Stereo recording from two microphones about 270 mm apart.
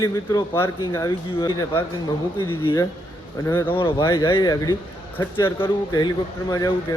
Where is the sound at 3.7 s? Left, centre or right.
Centre.